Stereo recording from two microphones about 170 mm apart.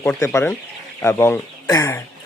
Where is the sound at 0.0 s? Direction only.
15° left (ahead or behind).